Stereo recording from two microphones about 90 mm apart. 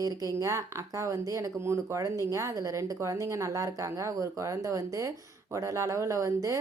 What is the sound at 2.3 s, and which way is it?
A woman's voice, 40° right (ahead or behind).